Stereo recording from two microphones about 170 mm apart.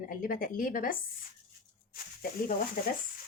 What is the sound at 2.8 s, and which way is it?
Speech, 55° left (ahead or behind).